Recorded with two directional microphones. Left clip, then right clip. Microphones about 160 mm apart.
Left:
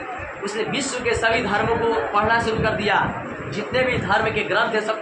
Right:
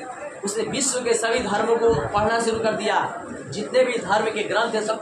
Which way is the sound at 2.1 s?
15° left (ahead or behind).